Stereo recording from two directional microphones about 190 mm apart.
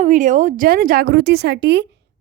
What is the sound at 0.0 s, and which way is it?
A woman's voice, 40° right (ahead or behind).